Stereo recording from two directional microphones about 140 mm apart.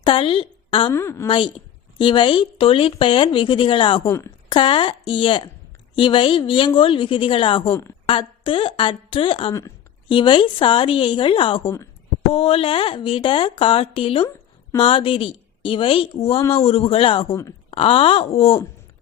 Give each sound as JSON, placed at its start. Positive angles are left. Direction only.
{"t": 0.0, "sound": "a woman's voice", "side_deg": 35}
{"t": 0.9, "sound": "a woman's voice", "side_deg": 20}
{"t": 1.3, "sound": "a woman's voice", "side_deg": 35}
{"t": 4.0, "sound": "a woman's voice", "side_deg": 15}
{"t": 4.4, "sound": "a woman's voice", "side_deg": 35}
{"t": 7.7, "sound": "a woman's voice", "side_deg": 20}
{"t": 8.0, "sound": "a woman's voice", "side_deg": 40}
{"t": 9.5, "sound": "a woman's voice", "side_deg": 20}
{"t": 10.1, "sound": "a woman's voice", "side_deg": 35}